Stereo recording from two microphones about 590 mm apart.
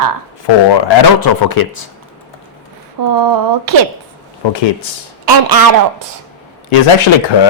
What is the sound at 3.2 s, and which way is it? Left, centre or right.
Speech, right.